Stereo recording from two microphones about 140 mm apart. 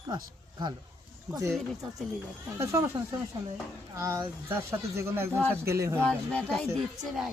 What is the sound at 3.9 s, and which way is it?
Speech, 20° right (ahead or behind).